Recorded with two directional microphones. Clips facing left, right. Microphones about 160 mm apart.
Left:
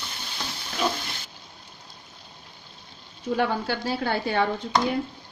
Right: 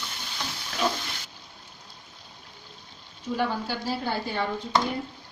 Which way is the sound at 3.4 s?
65° left (ahead or behind).